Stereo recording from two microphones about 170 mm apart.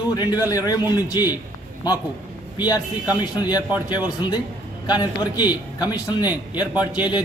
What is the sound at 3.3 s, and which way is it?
A man's voice, 25° left (ahead or behind).